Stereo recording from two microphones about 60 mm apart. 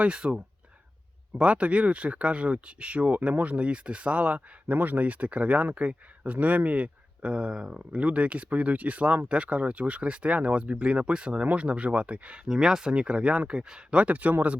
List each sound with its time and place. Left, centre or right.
0.0 s speech: centre
12.5 s speech: centre; by 14.6 s right